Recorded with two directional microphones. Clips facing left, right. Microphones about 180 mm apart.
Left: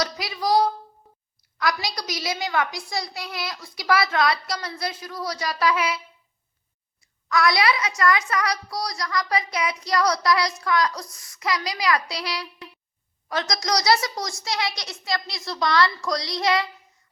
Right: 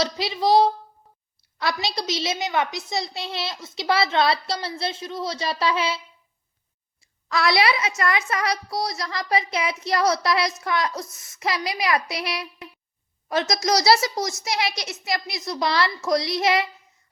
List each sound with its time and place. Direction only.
0.0 s a child's voice: 25° right (ahead or behind)
7.3 s a child's voice: 30° right (ahead or behind)